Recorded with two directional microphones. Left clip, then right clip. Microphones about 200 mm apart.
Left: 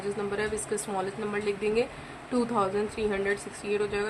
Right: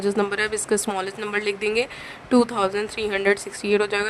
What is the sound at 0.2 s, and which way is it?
A woman's voice, 60° right (ahead or behind).